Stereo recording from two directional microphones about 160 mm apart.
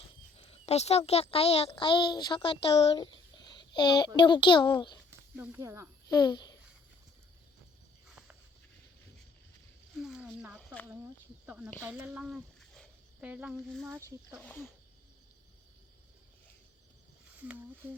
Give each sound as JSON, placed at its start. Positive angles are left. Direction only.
{"t": 0.3, "sound": "a child's voice", "side_deg": 40}
{"t": 5.4, "sound": "speech", "side_deg": -15}
{"t": 6.1, "sound": "speech", "side_deg": 25}
{"t": 8.0, "sound": "walk", "side_deg": -5}
{"t": 10.0, "sound": "speech", "side_deg": -5}
{"t": 14.4, "sound": "speech", "side_deg": 10}
{"t": 17.4, "sound": "speech", "side_deg": -10}